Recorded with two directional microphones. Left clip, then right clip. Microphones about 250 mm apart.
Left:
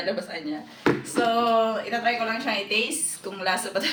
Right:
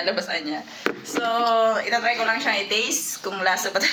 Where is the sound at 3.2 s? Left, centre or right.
Centre.